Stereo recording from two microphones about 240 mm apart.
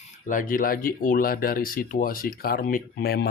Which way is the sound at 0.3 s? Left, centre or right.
Left.